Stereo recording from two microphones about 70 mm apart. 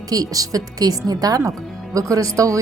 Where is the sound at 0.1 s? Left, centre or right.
Right.